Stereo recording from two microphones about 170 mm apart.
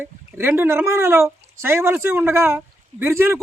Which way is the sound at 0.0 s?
10° right (ahead or behind).